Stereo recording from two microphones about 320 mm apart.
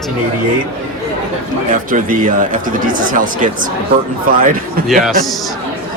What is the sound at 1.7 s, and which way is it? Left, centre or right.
Speech, right.